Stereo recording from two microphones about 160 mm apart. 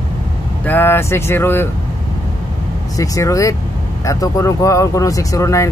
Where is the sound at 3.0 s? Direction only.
20° left (ahead or behind).